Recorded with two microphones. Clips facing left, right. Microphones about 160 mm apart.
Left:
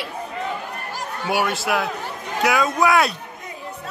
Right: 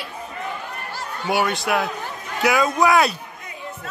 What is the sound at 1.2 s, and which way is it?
Speech, 5° left (ahead or behind).